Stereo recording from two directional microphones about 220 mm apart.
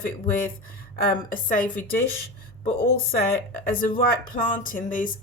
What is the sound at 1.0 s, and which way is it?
Speech, 40° left (ahead or behind).